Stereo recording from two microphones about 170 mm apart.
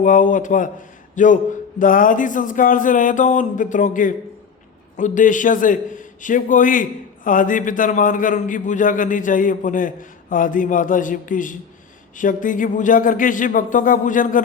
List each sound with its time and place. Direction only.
0.0 s a man's voice: 50° left (ahead or behind)